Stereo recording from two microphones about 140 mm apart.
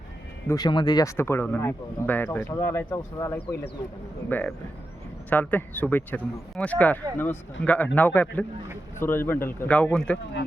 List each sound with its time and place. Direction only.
0.4 s speech: 25° left (ahead or behind); by 10.2 s 5° left (ahead or behind)